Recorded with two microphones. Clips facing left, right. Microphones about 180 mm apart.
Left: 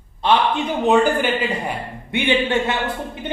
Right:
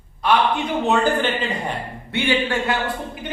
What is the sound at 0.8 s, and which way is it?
A man's voice, 10° left (ahead or behind).